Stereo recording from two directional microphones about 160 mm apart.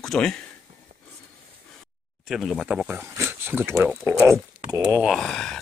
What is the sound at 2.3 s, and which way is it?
Speech, centre (ahead or behind).